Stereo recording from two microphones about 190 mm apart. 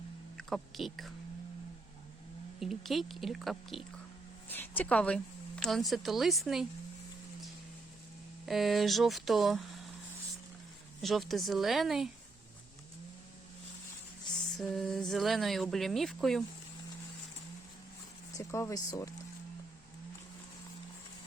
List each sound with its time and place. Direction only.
0.3 s speech: centre (ahead or behind)
2.6 s speech: centre (ahead or behind)
8.4 s speech: centre (ahead or behind)
11.0 s speech: centre (ahead or behind)
14.6 s speech: 5° left (ahead or behind)
18.3 s speech: 15° left (ahead or behind)